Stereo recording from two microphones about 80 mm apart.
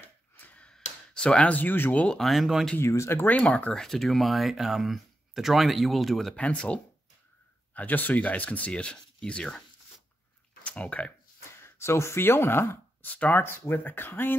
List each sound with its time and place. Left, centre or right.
0.4 s a sound: centre
2.1 s speech: centre
2.8 s speech: left
3.3 s speech: centre
3.8 s speech: centre
6.3 s speech: centre
10.6 s speech: centre
11.6 s speech: left